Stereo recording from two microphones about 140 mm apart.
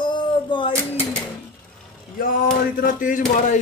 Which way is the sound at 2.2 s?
80° left.